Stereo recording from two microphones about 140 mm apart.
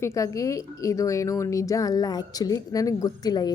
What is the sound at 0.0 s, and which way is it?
A woman's voice, 20° left (ahead or behind).